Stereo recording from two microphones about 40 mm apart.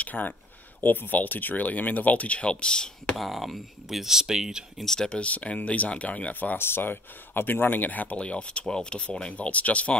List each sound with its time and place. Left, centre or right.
0.0 s speech: left
3.2 s speech: centre
4.8 s speech: centre
5.2 s speech: left
6.6 s speech: left
8.2 s speech: left
9.3 s speech: left